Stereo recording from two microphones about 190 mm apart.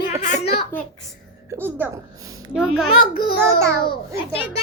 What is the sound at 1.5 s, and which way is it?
A woman's voice, 10° right (ahead or behind).